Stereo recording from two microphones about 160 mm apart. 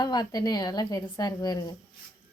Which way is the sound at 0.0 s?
25° left (ahead or behind).